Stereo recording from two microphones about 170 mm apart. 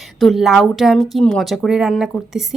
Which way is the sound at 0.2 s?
Centre (ahead or behind).